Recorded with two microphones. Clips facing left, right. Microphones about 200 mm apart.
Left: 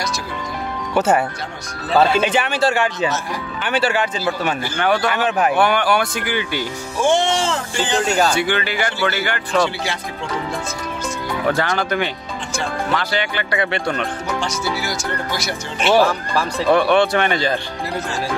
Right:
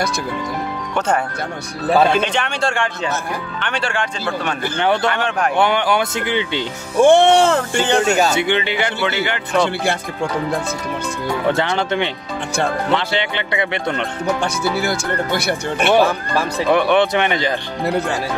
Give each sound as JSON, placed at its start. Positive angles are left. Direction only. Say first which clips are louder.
{"t": 0.9, "sound": "a man's voice", "louder": "left 3 dB", "side_deg": 5}
{"t": 4.7, "sound": "speech", "louder": "right 2 dB", "side_deg": -25}
{"t": 5.1, "sound": "a man's voice", "louder": "left 2 dB", "side_deg": 5}
{"t": 5.6, "sound": "speech", "louder": "right 3 dB", "side_deg": -20}
{"t": 7.0, "sound": "speech", "louder": "right 7 dB", "side_deg": -60}
{"t": 8.2, "sound": "speech", "louder": "right 1 dB", "side_deg": -20}
{"t": 11.4, "sound": "speech", "louder": "even", "side_deg": -25}
{"t": 14.4, "sound": "speech", "louder": "right 4 dB", "side_deg": -55}
{"t": 15.9, "sound": "speech", "louder": "even", "side_deg": -20}
{"t": 17.8, "sound": "speech", "louder": "right 10 dB", "side_deg": -60}